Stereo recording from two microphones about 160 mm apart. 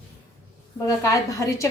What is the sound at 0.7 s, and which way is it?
Speech, 20° left (ahead or behind).